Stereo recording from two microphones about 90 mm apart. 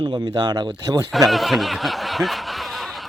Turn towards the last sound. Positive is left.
turn(degrees=0)  # may be behind; listen again after turning